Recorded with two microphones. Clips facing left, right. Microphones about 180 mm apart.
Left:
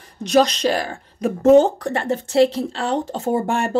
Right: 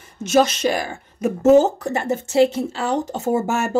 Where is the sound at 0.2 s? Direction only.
5° right (ahead or behind).